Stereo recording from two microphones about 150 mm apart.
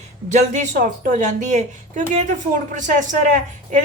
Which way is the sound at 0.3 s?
55° right (ahead or behind).